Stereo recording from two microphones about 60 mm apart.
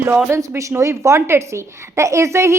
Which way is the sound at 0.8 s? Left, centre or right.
Right.